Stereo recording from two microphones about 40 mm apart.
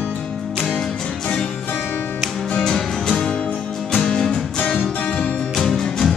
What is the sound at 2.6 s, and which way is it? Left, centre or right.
Music, centre.